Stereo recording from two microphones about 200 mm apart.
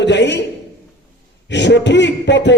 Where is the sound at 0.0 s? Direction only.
60° left (ahead or behind).